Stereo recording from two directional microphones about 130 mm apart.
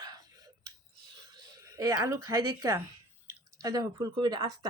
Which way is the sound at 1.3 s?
30° right (ahead or behind).